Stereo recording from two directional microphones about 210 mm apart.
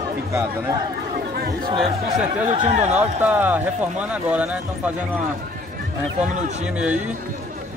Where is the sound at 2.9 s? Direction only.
5° right (ahead or behind).